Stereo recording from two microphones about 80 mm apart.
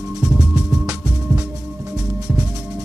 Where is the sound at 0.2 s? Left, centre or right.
Centre.